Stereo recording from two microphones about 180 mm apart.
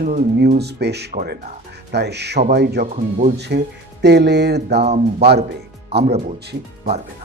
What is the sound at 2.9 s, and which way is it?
Speech, 45° right (ahead or behind).